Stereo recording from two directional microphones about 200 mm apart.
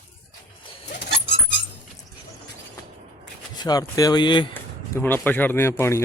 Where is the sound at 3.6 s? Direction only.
20° left (ahead or behind).